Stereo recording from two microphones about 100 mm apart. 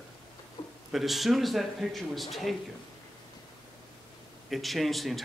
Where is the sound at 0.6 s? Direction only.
40° left (ahead or behind).